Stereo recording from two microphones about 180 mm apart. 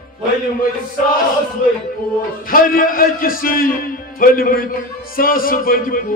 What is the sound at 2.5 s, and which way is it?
Speech, 50° left (ahead or behind).